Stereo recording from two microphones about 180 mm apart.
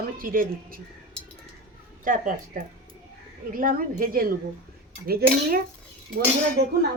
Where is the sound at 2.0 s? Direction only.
45° right (ahead or behind); by 6.7 s 65° right (ahead or behind).